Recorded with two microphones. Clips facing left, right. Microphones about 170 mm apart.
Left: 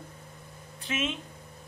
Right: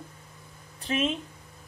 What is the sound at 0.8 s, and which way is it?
Speech, 35° right (ahead or behind).